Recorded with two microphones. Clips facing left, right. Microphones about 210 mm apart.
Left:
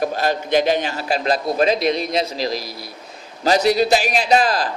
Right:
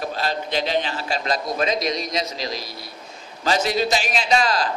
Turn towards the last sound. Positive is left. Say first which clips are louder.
# left 5 dB
turn(degrees=40)  # may be behind; listen again after turning